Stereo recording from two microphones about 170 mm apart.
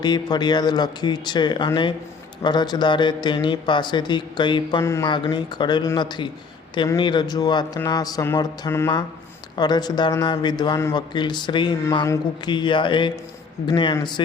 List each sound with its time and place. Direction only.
0.0 s speech: 25° left (ahead or behind)
4.8 s mantra: 15° left (ahead or behind)
5.0 s speech: 25° left (ahead or behind)